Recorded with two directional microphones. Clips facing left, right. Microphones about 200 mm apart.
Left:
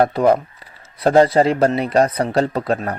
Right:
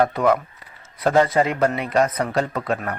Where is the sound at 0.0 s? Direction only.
35° left (ahead or behind).